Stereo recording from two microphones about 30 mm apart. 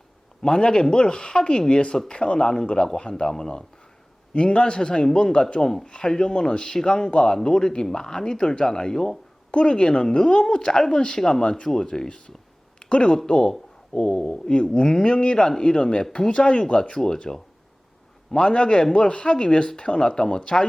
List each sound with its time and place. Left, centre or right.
0.4 s speech: left
4.4 s speech: left
5.6 s speech: left
6.5 s speech: left
9.5 s speech: left; by 11.4 s centre
11.4 s speech: left
11.7 s speech: left
12.8 s a sound: left
13.2 s speech: left
16.9 s speech: left
18.3 s speech: left